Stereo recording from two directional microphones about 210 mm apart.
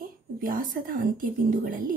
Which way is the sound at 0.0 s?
40° right (ahead or behind).